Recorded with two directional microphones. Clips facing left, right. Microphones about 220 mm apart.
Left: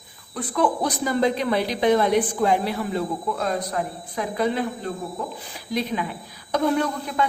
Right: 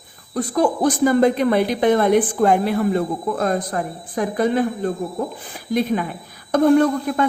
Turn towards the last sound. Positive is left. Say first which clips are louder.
# right 7 dB
turn(degrees=-50)  # may be behind; listen again after turning